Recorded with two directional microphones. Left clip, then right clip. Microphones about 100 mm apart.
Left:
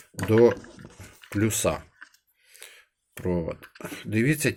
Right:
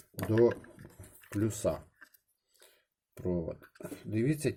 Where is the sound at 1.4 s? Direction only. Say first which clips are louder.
Left 7 dB; 5° right (ahead or behind).